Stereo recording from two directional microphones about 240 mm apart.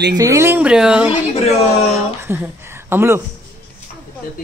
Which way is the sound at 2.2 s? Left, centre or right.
Centre.